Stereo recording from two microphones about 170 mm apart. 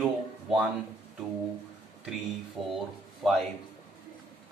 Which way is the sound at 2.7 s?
Centre (ahead or behind).